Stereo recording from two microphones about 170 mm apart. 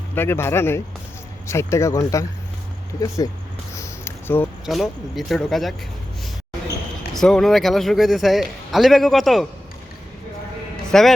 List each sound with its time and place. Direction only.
0.1 s speech: 15° left (ahead or behind)
3.8 s a sound: 15° left (ahead or behind)
4.6 s a man's voice: centre (ahead or behind)
7.1 s a man's voice: centre (ahead or behind)
10.9 s a man's voice: 5° left (ahead or behind)